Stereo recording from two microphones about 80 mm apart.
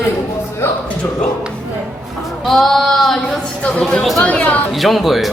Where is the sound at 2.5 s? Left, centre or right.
Centre.